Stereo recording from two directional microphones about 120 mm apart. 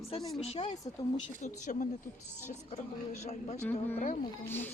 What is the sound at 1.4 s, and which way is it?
Speech, 90° left.